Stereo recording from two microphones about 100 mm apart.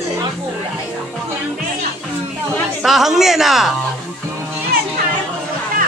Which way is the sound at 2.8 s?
5° right (ahead or behind).